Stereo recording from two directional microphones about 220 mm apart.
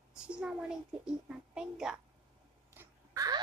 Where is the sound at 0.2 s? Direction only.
5° right (ahead or behind).